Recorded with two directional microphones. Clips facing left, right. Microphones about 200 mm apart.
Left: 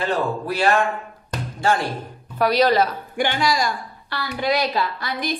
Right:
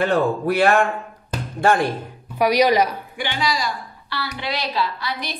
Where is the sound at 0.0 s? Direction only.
55° right (ahead or behind).